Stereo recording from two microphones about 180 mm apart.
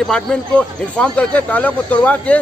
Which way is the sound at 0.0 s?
5° left (ahead or behind).